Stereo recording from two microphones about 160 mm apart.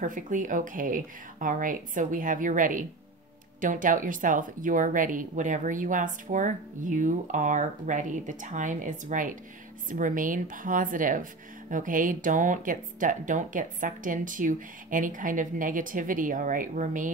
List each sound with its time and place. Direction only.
0.0 s speech: 55° right (ahead or behind)